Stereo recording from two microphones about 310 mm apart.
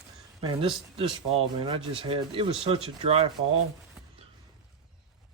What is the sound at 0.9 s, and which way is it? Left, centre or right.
Speech, centre.